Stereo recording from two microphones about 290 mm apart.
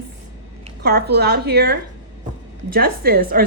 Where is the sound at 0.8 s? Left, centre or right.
Right.